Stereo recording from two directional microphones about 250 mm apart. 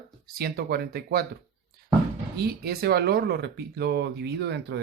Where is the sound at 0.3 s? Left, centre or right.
Right.